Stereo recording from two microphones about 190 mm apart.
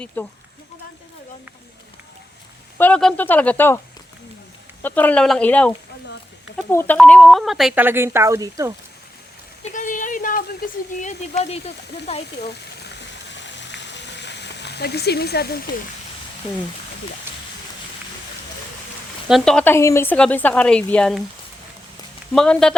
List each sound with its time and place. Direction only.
0.2 s speech: 10° left (ahead or behind)
2.7 s speech: 5° left (ahead or behind)
4.8 s speech: 10° left (ahead or behind); by 8.7 s 15° right (ahead or behind)
9.7 s a sound: 40° left (ahead or behind)
11.0 s speech: 35° left (ahead or behind)
13.2 s frying: 70° left (ahead or behind)
19.3 s speech: 5° left (ahead or behind)
22.4 s speech: 5° left (ahead or behind)